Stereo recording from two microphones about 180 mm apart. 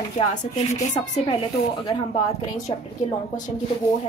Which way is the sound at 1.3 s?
25° left (ahead or behind).